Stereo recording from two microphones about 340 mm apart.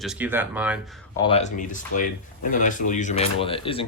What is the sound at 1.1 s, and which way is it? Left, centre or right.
Speech, centre.